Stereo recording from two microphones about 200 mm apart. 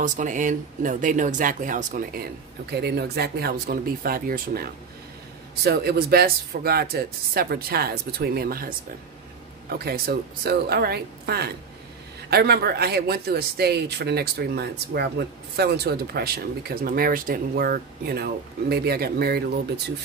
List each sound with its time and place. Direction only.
0.0 s speech: 40° right (ahead or behind)
2.7 s speech: 55° right (ahead or behind)